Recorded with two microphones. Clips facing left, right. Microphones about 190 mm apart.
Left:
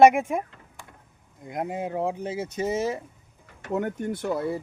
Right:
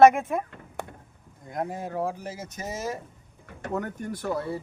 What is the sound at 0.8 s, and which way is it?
Vehicle, 65° right (ahead or behind).